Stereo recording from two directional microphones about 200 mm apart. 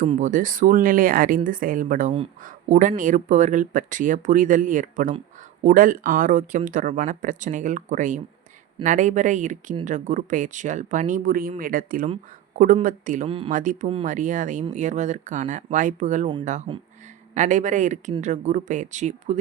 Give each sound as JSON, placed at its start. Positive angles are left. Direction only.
{"t": 0.0, "sound": "speech", "side_deg": -40}
{"t": 13.2, "sound": "speech", "side_deg": -25}
{"t": 13.5, "sound": "speech", "side_deg": -40}